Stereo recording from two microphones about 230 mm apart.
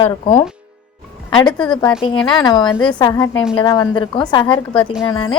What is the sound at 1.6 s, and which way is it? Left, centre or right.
Speech, centre.